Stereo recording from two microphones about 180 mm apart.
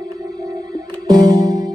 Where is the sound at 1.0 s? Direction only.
20° right (ahead or behind).